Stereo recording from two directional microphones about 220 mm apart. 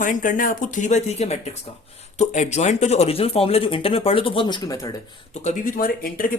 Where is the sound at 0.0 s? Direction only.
35° left (ahead or behind); by 4.9 s 15° left (ahead or behind).